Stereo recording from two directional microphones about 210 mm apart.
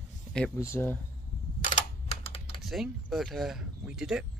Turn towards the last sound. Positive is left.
turn(degrees=-5)  # may be behind; listen again after turning